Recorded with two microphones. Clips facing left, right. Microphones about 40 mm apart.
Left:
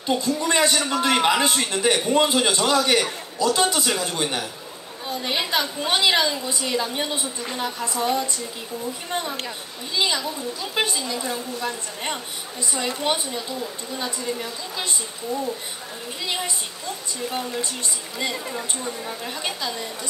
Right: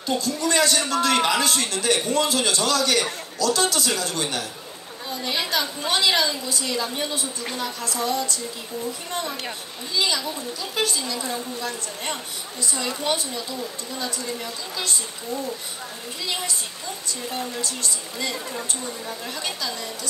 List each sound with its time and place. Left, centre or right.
0.0 s a man's voice: left
9.9 s a man's voice: left
17.3 s a man's voice: left
18.5 s a woman's voice: centre